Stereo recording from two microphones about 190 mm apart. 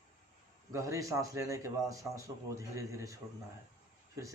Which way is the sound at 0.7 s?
15° right (ahead or behind).